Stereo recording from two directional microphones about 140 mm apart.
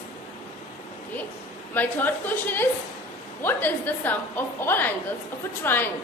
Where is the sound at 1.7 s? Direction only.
15° left (ahead or behind).